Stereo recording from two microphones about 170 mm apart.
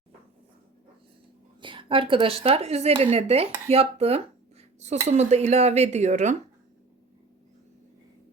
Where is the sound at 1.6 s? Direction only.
30° right (ahead or behind).